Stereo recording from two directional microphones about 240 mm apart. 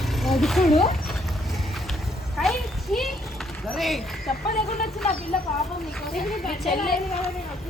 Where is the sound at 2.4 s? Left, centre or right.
Centre.